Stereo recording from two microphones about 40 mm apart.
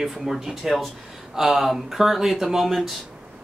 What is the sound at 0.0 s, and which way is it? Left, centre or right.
Speech, centre.